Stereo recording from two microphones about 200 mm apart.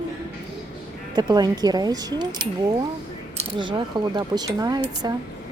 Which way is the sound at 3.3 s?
25° right (ahead or behind).